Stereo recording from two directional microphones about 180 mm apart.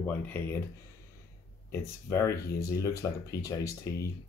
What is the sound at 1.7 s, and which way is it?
Speech, 15° left (ahead or behind).